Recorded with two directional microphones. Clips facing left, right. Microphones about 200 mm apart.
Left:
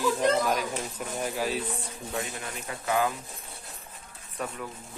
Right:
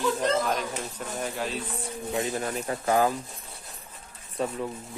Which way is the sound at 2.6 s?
40° right (ahead or behind).